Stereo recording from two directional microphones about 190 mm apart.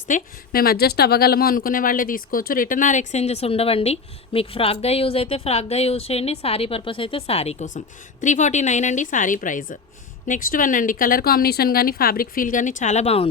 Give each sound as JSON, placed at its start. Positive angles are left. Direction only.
{"t": 0.1, "sound": "a woman's voice", "side_deg": 50}